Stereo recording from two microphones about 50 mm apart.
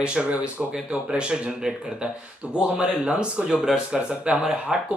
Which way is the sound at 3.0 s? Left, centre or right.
Right.